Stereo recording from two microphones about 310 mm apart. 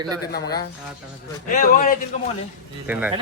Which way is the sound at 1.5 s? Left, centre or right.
Left.